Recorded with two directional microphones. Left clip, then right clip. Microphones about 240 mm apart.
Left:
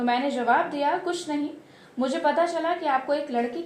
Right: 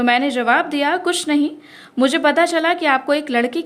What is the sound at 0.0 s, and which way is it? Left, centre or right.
A woman's voice, right.